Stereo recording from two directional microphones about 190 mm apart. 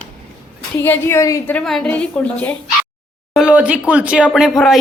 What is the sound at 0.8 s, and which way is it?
A woman's voice, 10° left (ahead or behind).